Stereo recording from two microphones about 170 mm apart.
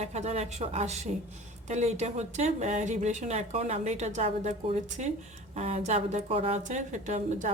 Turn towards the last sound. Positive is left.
turn(degrees=-45)  # may be behind; listen again after turning